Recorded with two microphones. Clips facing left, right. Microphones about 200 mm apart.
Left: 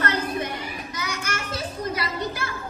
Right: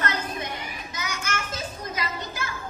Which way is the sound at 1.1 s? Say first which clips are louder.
Even; 35° left (ahead or behind).